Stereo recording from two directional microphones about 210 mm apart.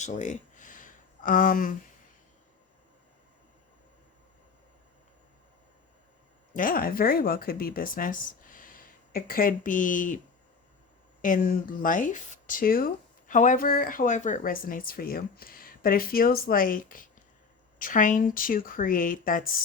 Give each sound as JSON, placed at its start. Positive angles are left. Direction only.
{"t": 0.0, "sound": "a sound", "side_deg": 35}
{"t": 6.5, "sound": "speech", "side_deg": 40}
{"t": 11.2, "sound": "speech", "side_deg": 40}